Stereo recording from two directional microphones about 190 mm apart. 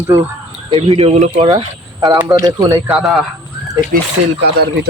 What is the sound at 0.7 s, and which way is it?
Speech, 25° right (ahead or behind).